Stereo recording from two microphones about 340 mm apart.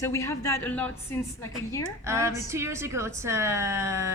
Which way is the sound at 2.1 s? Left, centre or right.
Centre.